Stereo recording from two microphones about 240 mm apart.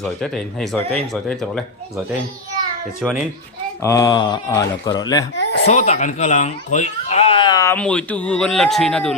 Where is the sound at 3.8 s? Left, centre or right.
Centre.